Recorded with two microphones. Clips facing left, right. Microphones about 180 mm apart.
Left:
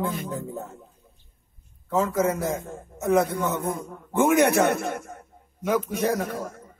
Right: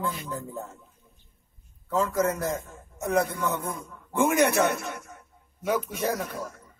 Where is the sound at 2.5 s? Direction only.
55° left (ahead or behind).